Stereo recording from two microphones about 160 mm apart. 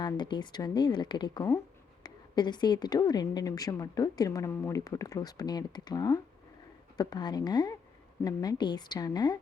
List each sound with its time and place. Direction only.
0.0 s a woman's voice: 30° left (ahead or behind)